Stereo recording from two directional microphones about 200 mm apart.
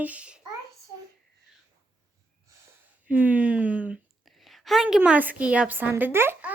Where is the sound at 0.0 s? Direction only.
5° right (ahead or behind).